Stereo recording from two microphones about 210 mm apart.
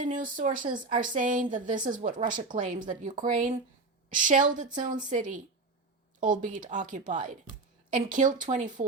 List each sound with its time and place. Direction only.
0.0 s speech: 40° right (ahead or behind)